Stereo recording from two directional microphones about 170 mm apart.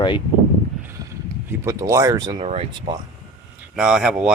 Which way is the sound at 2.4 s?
35° right (ahead or behind).